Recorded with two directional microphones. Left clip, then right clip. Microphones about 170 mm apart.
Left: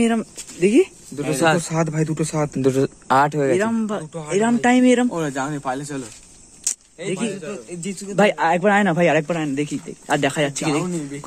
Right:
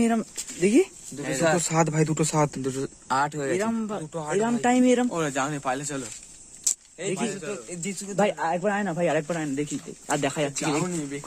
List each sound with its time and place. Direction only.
0.0 s a man's voice: 10° right (ahead or behind)
1.7 s speech: 50° right (ahead or behind)
2.6 s speech: 40° left (ahead or behind)
3.5 s speech: centre (ahead or behind)
4.1 s speech: 40° right (ahead or behind)
4.4 s a man's voice: 5° right (ahead or behind)
5.3 s speech: 30° right (ahead or behind)
6.7 s a sound: centre (ahead or behind)
7.2 s a man's voice: 90° right
7.9 s speech: 50° right (ahead or behind)
8.2 s speech: 5° left (ahead or behind)
8.5 s speech: 20° left (ahead or behind)
9.0 s speech: 5° left (ahead or behind)